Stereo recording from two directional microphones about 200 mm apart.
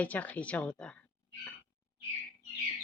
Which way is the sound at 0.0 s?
10° left (ahead or behind).